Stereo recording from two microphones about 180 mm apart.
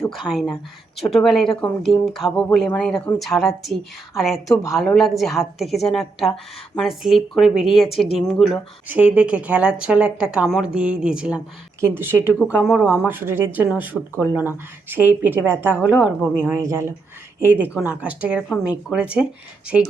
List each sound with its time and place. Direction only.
0.1 s speech: centre (ahead or behind)
7.9 s speech: 30° left (ahead or behind)
8.2 s speech: 5° left (ahead or behind)
8.9 s a woman's voice: 10° right (ahead or behind)
12.6 s speech: centre (ahead or behind)
13.0 s a woman's voice: 10° right (ahead or behind)